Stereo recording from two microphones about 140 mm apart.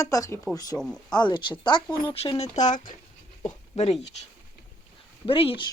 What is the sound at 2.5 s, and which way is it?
Speech, 60° left (ahead or behind).